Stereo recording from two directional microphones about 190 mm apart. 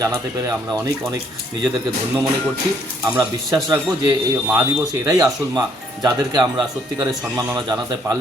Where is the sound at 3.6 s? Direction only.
20° right (ahead or behind).